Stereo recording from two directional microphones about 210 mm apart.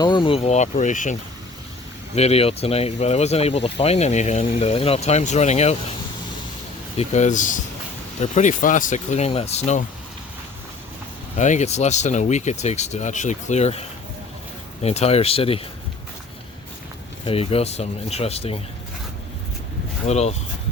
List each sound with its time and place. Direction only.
0.0 s speech: 20° left (ahead or behind)
2.1 s speech: 30° left (ahead or behind)
6.9 s speech: 30° left (ahead or behind)
11.3 s speech: 35° left (ahead or behind)
17.2 s speech: 25° left (ahead or behind)
20.1 s speech: 30° left (ahead or behind)